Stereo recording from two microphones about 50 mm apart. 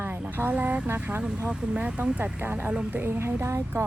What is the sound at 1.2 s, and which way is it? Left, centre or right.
Speech, right.